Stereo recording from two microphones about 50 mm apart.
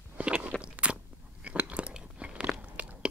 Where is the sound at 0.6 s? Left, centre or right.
Right.